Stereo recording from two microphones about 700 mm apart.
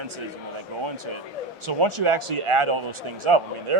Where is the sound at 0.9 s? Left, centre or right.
Right.